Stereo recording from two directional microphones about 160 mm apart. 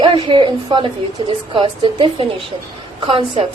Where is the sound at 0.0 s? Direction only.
30° right (ahead or behind).